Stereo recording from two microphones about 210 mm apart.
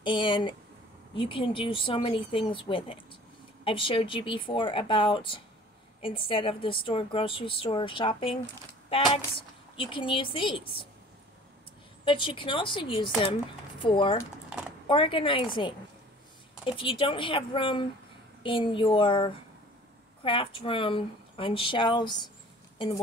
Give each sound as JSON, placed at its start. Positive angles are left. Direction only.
{"t": 0.0, "sound": "a woman's voice", "side_deg": 25}
{"t": 12.0, "sound": "a woman's voice", "side_deg": 25}